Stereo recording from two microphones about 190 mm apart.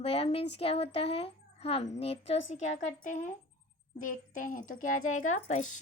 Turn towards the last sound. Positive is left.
turn(degrees=40)  # may be behind; listen again after turning